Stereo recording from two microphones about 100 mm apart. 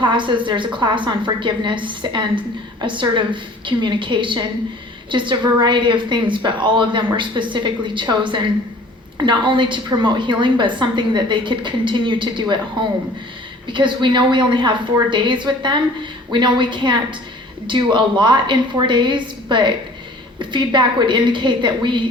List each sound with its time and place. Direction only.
0.0 s a woman's voice: 55° right (ahead or behind)